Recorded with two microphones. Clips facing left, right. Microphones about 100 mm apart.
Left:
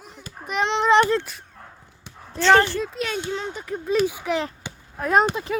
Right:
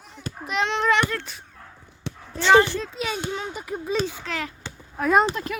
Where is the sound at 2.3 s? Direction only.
15° right (ahead or behind).